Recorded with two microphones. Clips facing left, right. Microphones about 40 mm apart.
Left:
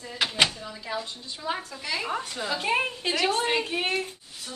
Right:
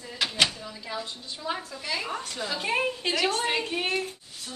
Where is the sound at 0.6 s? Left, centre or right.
Centre.